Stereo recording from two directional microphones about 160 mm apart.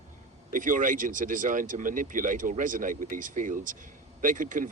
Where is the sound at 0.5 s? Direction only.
55° right (ahead or behind).